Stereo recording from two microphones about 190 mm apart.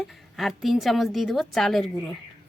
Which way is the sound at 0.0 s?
Centre (ahead or behind).